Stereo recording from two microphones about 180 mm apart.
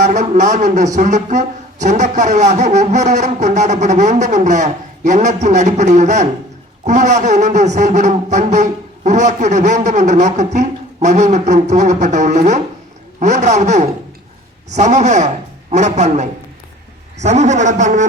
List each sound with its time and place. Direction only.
0.0 s a man's voice: 40° right (ahead or behind)